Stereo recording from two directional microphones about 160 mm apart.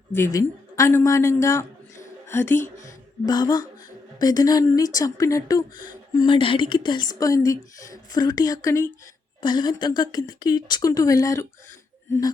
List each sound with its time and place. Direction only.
0.3 s a woman's voice: 20° left (ahead or behind)
9.4 s a woman's voice: 25° left (ahead or behind)